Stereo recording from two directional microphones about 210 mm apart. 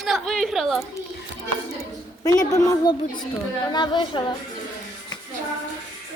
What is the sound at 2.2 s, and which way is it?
A child's voice, 15° left (ahead or behind).